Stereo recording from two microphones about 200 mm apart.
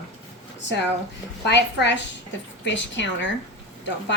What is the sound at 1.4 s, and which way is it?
A woman's voice, 60° left (ahead or behind).